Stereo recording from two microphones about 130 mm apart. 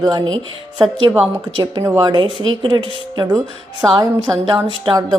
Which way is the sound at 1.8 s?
25° right (ahead or behind).